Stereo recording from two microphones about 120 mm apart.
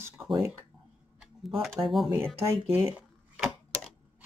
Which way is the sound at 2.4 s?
20° right (ahead or behind).